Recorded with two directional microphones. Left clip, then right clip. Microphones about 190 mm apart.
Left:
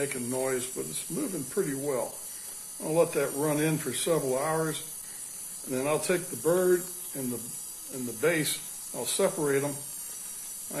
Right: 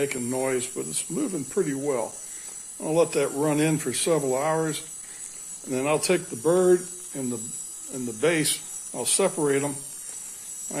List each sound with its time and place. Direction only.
0.0 s speech: 45° right (ahead or behind)